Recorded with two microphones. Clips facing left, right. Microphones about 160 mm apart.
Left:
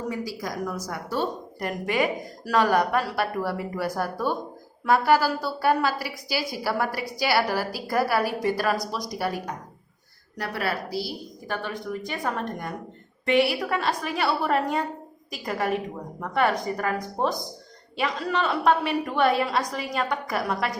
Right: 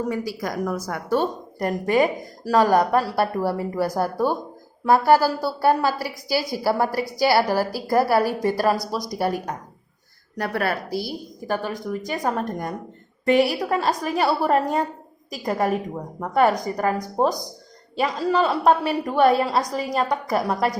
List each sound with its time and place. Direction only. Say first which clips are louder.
0.1 s a woman's voice: right 4 dB; 60° right (ahead or behind); by 20.7 s 40° right (ahead or behind)